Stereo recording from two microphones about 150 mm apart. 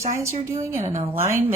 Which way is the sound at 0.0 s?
20° right (ahead or behind).